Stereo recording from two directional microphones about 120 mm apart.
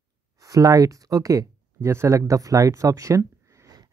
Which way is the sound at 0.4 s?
30° right (ahead or behind).